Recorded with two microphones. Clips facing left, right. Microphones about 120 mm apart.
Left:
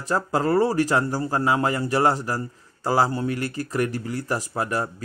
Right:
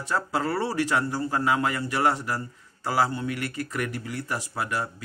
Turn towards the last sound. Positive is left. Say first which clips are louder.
# left 4 dB
turn(degrees=40)  # may be behind; listen again after turning